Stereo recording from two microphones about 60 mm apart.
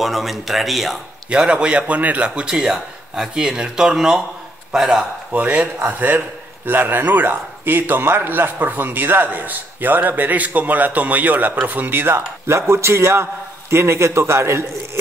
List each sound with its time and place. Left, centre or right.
0.0 s speech: centre
1.3 s a man's voice: centre
5.3 s a man's voice: right
12.4 s a man's voice: right